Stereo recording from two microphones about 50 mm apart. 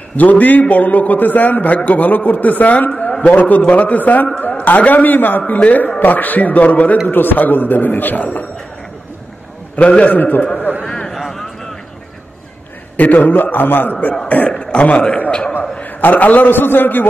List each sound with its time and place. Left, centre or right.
0.2 s a man's voice: left
3.1 s a man's voice: left
9.8 s a man's voice: left
10.8 s a sound: centre
12.9 s a man's voice: left
14.2 s a man's voice: left
15.8 s a man's voice: left